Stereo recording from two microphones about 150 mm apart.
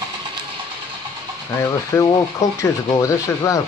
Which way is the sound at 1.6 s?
20° left (ahead or behind).